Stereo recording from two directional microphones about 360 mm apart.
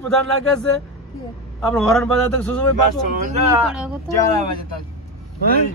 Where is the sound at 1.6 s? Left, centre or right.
Centre.